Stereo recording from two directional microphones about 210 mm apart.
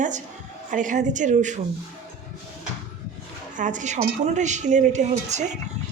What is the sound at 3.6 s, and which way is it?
A woman's voice, 35° right (ahead or behind).